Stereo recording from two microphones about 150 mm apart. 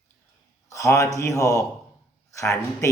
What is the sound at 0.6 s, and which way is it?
A man's voice, 20° left (ahead or behind).